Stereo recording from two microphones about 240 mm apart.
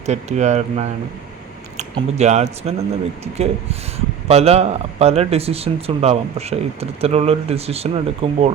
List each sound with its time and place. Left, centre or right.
0.0 s speech: right